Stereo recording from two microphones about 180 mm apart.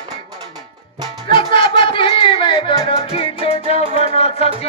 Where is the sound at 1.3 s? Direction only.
25° left (ahead or behind).